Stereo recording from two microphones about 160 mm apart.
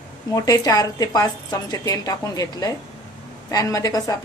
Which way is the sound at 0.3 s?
20° left (ahead or behind).